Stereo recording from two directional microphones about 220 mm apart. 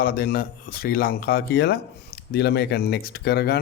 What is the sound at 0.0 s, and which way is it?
Speech, 40° left (ahead or behind).